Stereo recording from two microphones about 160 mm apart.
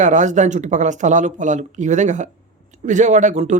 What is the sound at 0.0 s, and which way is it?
Speech, 50° right (ahead or behind).